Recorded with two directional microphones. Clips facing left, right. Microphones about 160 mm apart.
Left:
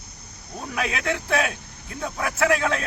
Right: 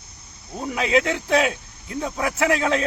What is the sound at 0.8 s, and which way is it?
Speech, 20° right (ahead or behind).